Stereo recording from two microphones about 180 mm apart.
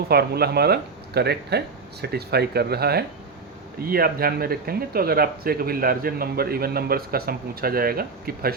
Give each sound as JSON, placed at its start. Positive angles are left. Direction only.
{"t": 0.1, "sound": "speech", "side_deg": -60}